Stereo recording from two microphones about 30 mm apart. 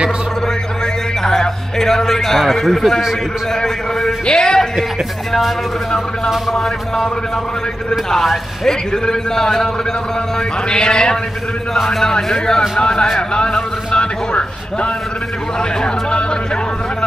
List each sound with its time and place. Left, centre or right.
1.2 s a man's voice: centre
4.3 s a man's voice: left
6.5 s a man's voice: centre
8.6 s a man's voice: centre
10.7 s a man's voice: left
12.0 s a man's voice: centre
12.7 s a man's voice: left
13.9 s a sound: left
15.8 s speech: left